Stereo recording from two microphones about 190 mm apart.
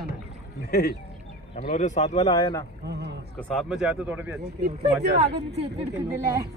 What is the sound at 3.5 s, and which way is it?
Speech, centre (ahead or behind).